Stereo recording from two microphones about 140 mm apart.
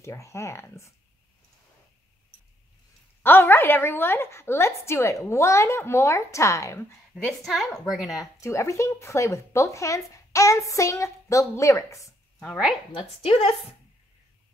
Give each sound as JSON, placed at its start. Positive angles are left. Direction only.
{"t": 0.0, "sound": "speech", "side_deg": 20}
{"t": 3.2, "sound": "speech", "side_deg": 15}
{"t": 7.2, "sound": "a woman's voice", "side_deg": 0}
{"t": 8.1, "sound": "speech", "side_deg": 25}
{"t": 12.9, "sound": "a woman's voice", "side_deg": 45}